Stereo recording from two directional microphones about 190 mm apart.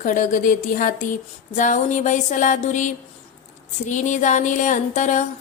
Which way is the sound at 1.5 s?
40° left (ahead or behind).